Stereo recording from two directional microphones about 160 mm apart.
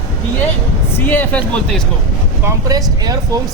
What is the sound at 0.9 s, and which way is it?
Speech, 10° left (ahead or behind).